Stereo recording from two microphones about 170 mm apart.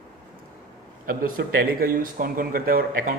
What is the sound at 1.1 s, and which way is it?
Speech, 60° right (ahead or behind).